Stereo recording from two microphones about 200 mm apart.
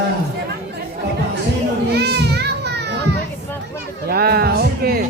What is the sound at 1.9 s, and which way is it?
Children playing, 55° right (ahead or behind).